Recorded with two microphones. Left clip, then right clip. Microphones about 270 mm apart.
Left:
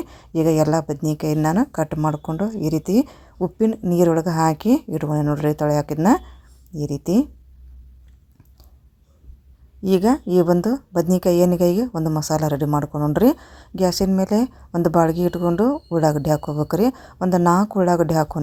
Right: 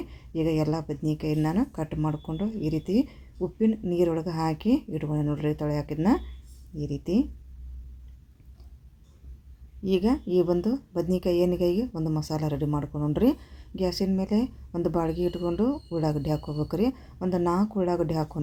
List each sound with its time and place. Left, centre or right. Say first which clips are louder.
0.0 s a woman's voice: left 9 dB; left
9.8 s a woman's voice: left 8 dB; left